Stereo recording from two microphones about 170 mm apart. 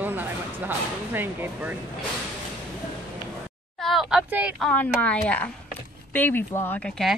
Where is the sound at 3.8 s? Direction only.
Centre (ahead or behind).